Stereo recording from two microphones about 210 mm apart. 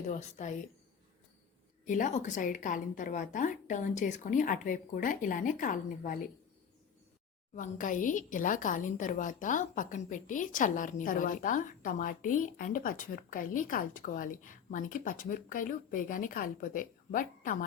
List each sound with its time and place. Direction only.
0.1 s a woman's voice: 35° left (ahead or behind)
1.9 s a woman's voice: 35° left (ahead or behind)
7.5 s a woman's voice: 40° left (ahead or behind)